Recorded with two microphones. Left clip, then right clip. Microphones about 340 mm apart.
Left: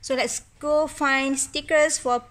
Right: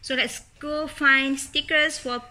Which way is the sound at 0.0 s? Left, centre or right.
Centre.